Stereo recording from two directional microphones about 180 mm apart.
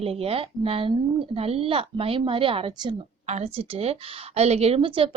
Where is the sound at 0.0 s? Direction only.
35° right (ahead or behind).